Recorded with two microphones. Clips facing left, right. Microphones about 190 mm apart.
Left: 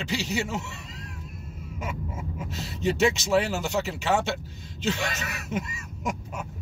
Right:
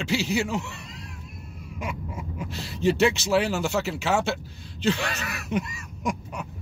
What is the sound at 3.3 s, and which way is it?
Speech, centre (ahead or behind).